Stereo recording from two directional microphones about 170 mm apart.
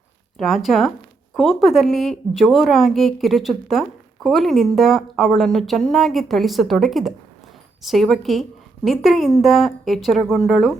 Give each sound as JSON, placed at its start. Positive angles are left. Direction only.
{"t": 0.3, "sound": "speech", "side_deg": 0}